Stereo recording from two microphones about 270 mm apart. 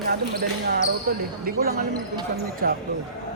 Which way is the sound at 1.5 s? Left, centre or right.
Right.